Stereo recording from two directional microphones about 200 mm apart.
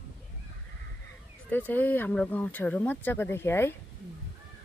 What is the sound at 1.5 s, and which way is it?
Speech, 10° left (ahead or behind).